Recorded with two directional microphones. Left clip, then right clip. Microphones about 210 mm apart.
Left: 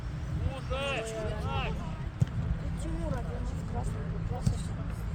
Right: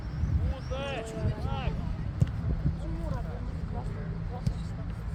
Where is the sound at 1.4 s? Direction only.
50° left (ahead or behind).